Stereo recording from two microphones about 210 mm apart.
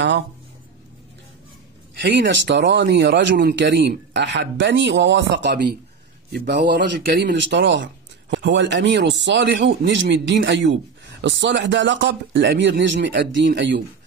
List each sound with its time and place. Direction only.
2.0 s speech: 60° right (ahead or behind)